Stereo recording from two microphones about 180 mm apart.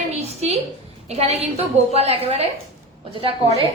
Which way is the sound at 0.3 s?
35° right (ahead or behind).